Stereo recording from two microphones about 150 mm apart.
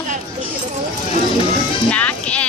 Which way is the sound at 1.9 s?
10° left (ahead or behind).